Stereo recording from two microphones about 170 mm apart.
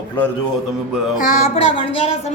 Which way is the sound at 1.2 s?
45° left (ahead or behind).